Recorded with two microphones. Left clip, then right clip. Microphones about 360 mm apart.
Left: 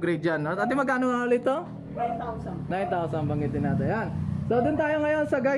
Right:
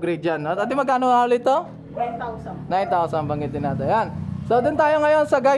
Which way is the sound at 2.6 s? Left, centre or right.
Centre.